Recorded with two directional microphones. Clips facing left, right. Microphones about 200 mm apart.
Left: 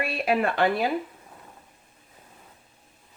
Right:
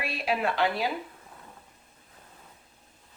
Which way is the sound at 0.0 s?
55° left (ahead or behind).